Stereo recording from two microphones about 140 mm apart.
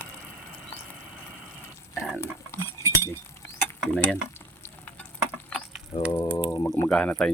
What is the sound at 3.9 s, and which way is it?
Frying, 10° left (ahead or behind).